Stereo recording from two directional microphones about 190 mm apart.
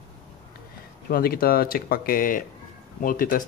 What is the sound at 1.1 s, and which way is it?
Speech, 50° left (ahead or behind).